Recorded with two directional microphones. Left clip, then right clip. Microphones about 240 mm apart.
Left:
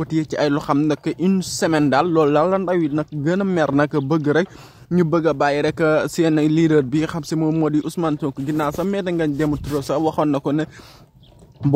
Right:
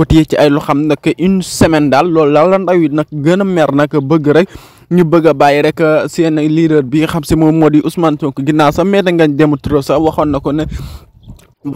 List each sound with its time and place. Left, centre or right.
0.0 s a man's voice: right